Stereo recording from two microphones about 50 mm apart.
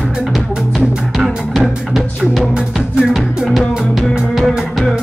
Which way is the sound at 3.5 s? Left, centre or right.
Centre.